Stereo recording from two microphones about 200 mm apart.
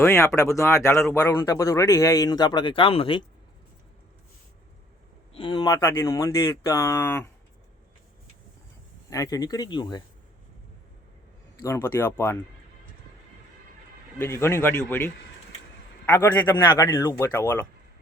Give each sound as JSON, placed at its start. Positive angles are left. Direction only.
{"t": 0.0, "sound": "speech", "side_deg": 15}
{"t": 5.3, "sound": "speech", "side_deg": 25}
{"t": 9.0, "sound": "speech", "side_deg": 15}
{"t": 11.6, "sound": "speech", "side_deg": 15}
{"t": 14.2, "sound": "speech", "side_deg": 15}